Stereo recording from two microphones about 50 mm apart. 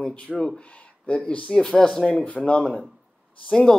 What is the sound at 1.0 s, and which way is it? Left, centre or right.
Speech, left.